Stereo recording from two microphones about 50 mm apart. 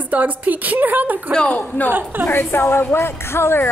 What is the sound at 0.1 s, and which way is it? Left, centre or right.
A woman's voice, right.